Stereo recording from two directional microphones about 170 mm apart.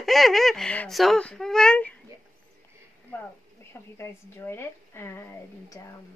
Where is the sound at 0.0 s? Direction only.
Centre (ahead or behind).